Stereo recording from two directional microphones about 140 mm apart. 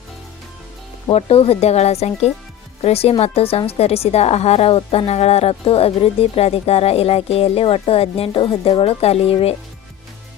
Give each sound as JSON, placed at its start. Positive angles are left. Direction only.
{"t": 1.1, "sound": "a woman's voice", "side_deg": 45}